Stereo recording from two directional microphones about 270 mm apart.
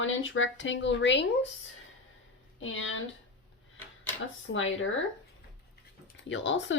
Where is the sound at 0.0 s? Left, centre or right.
Left.